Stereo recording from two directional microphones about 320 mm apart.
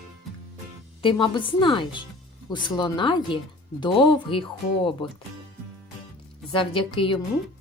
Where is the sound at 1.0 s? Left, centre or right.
Centre.